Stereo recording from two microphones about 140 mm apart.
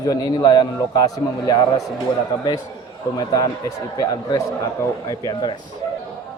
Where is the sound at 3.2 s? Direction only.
25° left (ahead or behind).